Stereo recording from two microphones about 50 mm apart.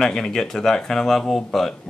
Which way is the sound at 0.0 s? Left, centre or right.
Centre.